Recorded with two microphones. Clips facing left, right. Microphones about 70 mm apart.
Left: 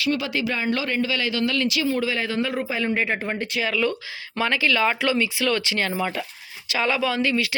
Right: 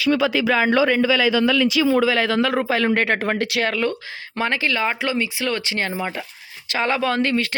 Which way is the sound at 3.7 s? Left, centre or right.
Right.